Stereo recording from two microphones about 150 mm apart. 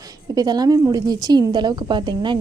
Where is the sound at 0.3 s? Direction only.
25° right (ahead or behind).